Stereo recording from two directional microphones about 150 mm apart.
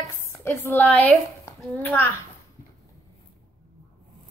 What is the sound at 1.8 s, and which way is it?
Speech, 15° left (ahead or behind).